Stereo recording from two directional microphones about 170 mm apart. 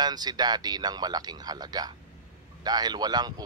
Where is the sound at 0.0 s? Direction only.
25° right (ahead or behind).